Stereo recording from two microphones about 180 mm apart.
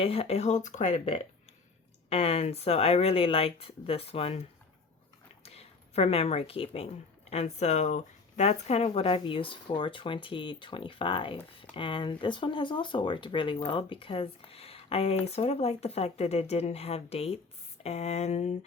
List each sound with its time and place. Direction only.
0.0 s speech: 35° left (ahead or behind)